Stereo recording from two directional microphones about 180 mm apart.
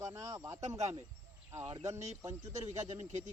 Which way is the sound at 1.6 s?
20° right (ahead or behind).